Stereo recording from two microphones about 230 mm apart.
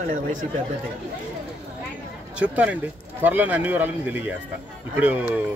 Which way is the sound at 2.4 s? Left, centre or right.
Centre.